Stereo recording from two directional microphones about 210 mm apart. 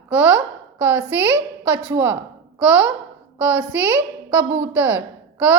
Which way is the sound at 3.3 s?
5° right (ahead or behind).